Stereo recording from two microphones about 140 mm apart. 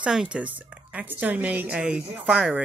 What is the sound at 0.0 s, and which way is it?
Speech, 5° right (ahead or behind).